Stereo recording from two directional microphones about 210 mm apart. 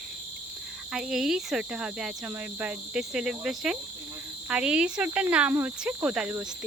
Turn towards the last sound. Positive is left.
turn(degrees=-5)  # may be behind; listen again after turning